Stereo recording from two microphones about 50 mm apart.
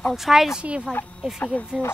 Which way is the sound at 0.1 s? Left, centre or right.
Centre.